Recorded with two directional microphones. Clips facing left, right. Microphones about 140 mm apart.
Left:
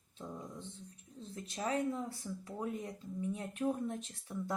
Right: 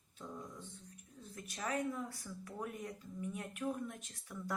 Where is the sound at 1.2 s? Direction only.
25° left (ahead or behind).